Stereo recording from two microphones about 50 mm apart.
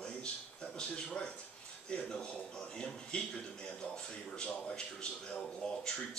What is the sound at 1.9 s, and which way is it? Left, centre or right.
A man's voice, centre.